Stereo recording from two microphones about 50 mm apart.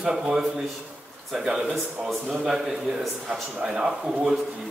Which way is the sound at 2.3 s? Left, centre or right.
Centre.